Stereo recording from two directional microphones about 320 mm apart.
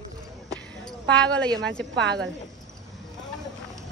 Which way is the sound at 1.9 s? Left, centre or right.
Right.